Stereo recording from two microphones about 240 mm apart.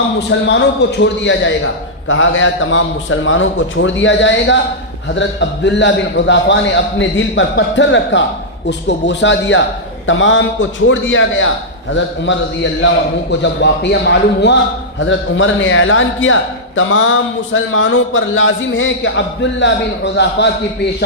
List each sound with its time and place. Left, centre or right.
0.2 s a man's voice: left
13.4 s a man's voice: left